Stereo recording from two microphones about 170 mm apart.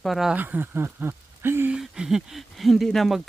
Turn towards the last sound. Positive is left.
turn(degrees=0)  # may be behind; listen again after turning